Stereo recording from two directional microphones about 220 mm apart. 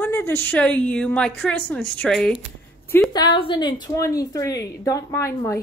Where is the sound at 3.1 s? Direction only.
20° left (ahead or behind).